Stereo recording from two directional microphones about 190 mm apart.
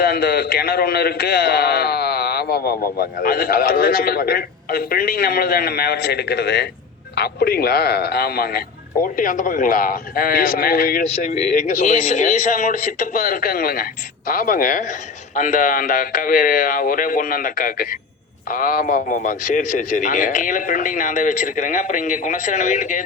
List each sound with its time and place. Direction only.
0.0 s a man's voice: 55° left (ahead or behind); by 23.0 s 40° left (ahead or behind)